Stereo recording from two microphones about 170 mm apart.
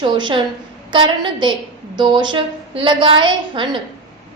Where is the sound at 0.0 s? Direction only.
30° right (ahead or behind).